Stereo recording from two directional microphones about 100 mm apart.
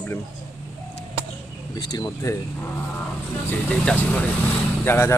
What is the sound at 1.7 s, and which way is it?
Speech, 40° left (ahead or behind).